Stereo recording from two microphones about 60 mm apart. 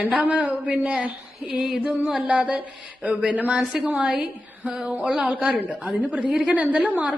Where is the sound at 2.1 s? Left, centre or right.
Centre.